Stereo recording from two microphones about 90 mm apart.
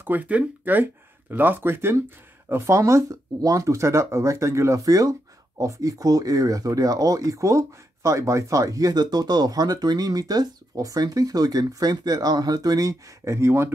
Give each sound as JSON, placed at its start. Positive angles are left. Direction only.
{"t": 0.0, "sound": "speech", "side_deg": -20}